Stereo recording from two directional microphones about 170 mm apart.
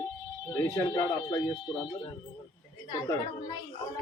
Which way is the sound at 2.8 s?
25° left (ahead or behind).